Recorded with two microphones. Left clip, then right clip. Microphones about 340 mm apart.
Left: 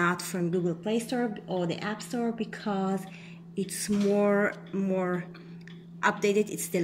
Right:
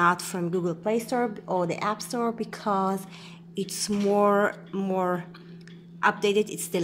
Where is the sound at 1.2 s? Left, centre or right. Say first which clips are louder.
Right 4 dB; right.